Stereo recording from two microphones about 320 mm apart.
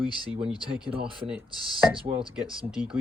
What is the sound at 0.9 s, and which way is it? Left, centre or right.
Speech, centre.